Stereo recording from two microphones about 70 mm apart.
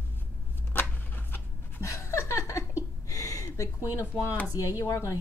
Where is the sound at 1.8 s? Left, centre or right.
Left.